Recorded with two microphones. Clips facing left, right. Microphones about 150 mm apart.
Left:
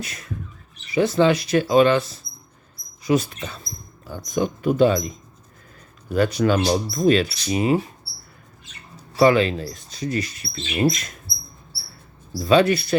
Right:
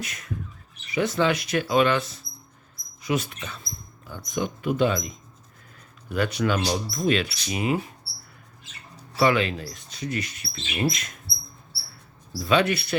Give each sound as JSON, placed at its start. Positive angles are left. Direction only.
{"t": 0.0, "sound": "speech", "side_deg": 30}
{"t": 9.1, "sound": "speech", "side_deg": 35}
{"t": 12.3, "sound": "speech", "side_deg": 35}